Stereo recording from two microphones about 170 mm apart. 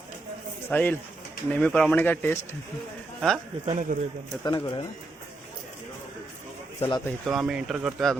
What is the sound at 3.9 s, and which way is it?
Speech, 50° right (ahead or behind).